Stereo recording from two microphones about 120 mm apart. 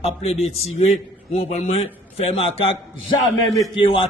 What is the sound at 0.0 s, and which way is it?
A man's voice, 55° left (ahead or behind).